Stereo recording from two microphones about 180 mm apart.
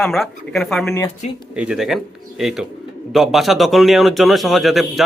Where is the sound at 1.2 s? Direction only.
40° left (ahead or behind).